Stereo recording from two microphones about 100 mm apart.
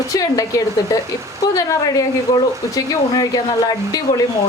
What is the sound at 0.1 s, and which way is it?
Speech, 35° left (ahead or behind).